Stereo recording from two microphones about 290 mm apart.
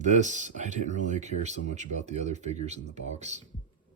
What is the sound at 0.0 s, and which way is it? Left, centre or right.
Speech, right.